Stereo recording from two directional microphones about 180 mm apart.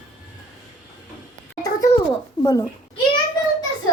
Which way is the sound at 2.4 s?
25° left (ahead or behind).